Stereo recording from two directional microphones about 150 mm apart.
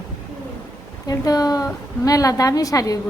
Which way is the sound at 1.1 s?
25° left (ahead or behind).